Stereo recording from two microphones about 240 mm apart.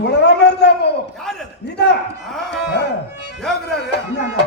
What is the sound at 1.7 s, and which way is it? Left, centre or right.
Speech, left.